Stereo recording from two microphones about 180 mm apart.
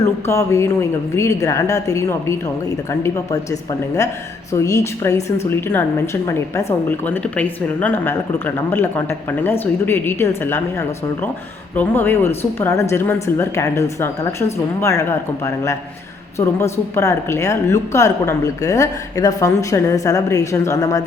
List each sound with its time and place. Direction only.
0.0 s a woman's voice: 15° left (ahead or behind)
3.5 s a woman's voice: 20° left (ahead or behind)